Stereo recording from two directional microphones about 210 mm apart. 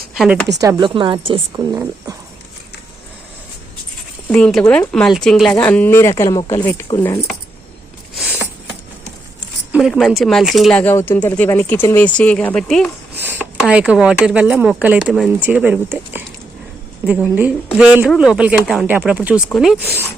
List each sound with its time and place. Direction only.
0.6 s a woman's voice: 20° right (ahead or behind)
4.3 s speech: 5° left (ahead or behind)
9.7 s speech: centre (ahead or behind)